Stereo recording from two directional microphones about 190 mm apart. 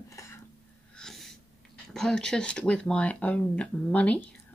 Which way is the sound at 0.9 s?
5° left (ahead or behind).